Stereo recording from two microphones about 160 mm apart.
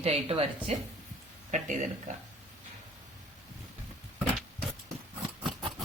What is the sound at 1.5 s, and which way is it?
Speech, 50° right (ahead or behind).